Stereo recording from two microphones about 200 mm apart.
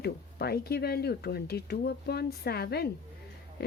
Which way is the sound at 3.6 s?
50° left (ahead or behind).